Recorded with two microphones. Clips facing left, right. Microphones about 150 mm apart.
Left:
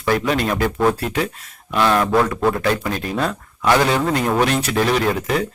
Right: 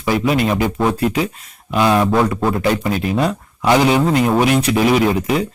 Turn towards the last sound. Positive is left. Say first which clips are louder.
# right 4 dB
turn(degrees=-10)  # may be behind; listen again after turning